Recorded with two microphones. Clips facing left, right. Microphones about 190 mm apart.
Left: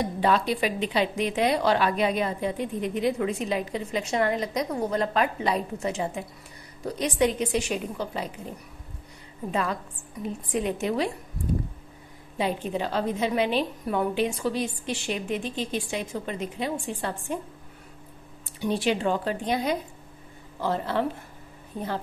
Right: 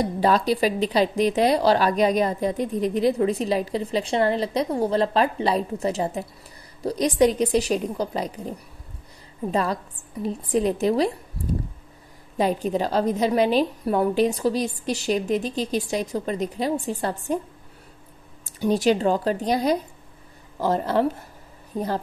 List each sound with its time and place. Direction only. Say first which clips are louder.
0.0 s speech: right 3 dB; 35° right (ahead or behind)
9.5 s speech: right 4 dB; 35° right (ahead or behind)
12.4 s speech: right 5 dB; 40° right (ahead or behind)
18.6 s speech: right 5 dB; 40° right (ahead or behind)